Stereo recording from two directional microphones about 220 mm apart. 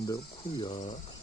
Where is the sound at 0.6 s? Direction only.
20° left (ahead or behind).